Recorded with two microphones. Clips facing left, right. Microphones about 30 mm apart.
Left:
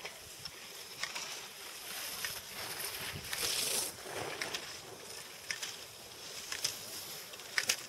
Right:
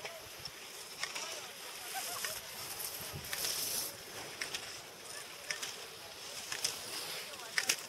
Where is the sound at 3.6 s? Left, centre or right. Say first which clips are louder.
Left 4 dB; left.